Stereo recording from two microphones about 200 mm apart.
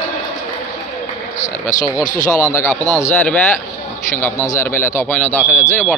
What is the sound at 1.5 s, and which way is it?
Speech, 40° left (ahead or behind).